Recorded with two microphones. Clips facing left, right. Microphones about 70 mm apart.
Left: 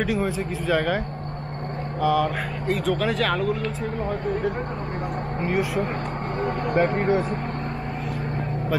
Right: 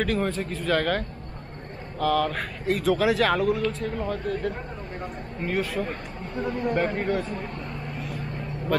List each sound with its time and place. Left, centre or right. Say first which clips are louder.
0.0 s speech: left 1 dB; centre
5.4 s speech: left 2 dB; centre
6.3 s speech: left 2 dB; left